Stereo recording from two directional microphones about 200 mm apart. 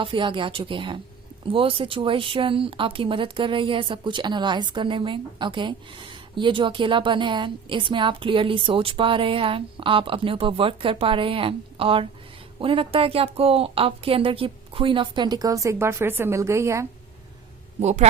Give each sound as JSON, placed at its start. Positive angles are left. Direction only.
{"t": 0.0, "sound": "speech", "side_deg": -25}
{"t": 17.7, "sound": "speech", "side_deg": -35}